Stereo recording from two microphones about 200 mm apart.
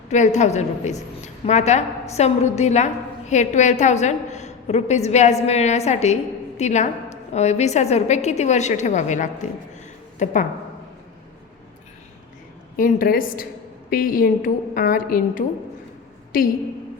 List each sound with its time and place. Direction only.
0.1 s a woman's voice: 35° left (ahead or behind)
12.7 s a woman's voice: 45° left (ahead or behind)